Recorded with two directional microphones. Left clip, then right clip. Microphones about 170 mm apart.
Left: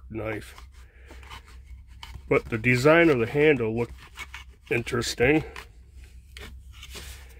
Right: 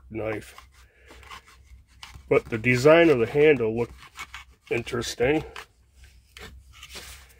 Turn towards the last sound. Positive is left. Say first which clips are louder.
# even
turn(degrees=0)  # may be behind; listen again after turning